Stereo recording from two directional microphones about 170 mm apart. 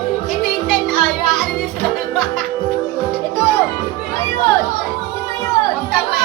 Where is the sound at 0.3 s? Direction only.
5° left (ahead or behind).